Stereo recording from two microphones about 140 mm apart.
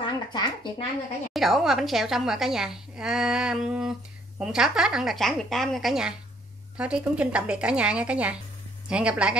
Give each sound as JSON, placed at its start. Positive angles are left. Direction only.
{"t": 0.0, "sound": "speech", "side_deg": 35}
{"t": 1.3, "sound": "a woman's voice", "side_deg": 0}